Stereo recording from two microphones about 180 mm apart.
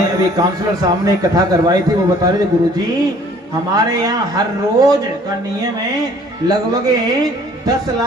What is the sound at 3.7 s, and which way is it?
Speech, 20° right (ahead or behind).